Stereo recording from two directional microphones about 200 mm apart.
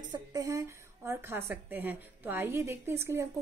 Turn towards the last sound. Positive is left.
turn(degrees=-15)  # may be behind; listen again after turning